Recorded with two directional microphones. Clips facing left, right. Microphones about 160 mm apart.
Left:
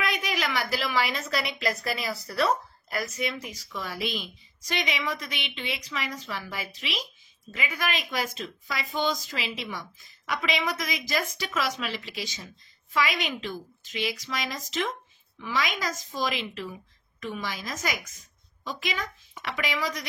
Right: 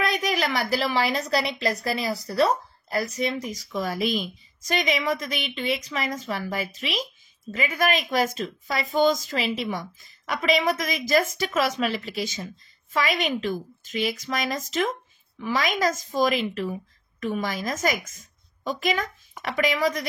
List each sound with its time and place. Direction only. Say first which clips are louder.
0.0 s a woman's voice: right 5 dB; 40° right (ahead or behind)